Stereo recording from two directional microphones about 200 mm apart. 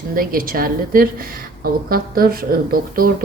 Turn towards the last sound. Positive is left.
turn(degrees=-45)  # may be behind; listen again after turning